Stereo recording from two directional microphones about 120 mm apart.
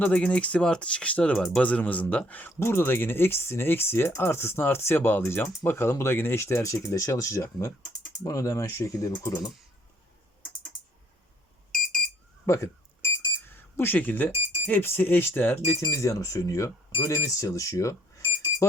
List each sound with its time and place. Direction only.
0.0 s speech: 10° left (ahead or behind); by 9.5 s 25° left (ahead or behind)
12.5 s a sound: 20° left (ahead or behind)
13.5 s speech: 20° left (ahead or behind)